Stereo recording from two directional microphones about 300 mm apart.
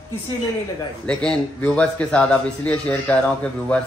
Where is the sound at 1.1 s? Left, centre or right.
Centre.